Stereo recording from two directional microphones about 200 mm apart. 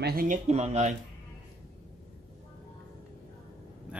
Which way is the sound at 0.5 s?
35° right (ahead or behind).